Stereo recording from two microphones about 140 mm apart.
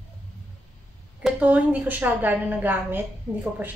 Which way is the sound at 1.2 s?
10° right (ahead or behind).